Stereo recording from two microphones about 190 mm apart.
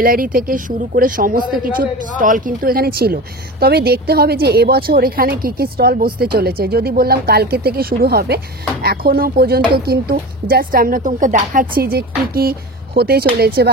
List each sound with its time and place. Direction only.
0.0 s speech: 50° right (ahead or behind)